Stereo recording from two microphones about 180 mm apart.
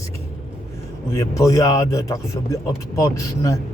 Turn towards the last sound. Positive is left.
turn(degrees=15)  # may be behind; listen again after turning